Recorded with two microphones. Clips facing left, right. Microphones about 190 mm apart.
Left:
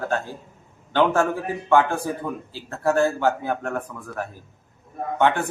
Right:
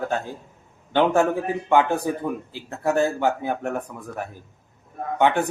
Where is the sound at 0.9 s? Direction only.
15° right (ahead or behind).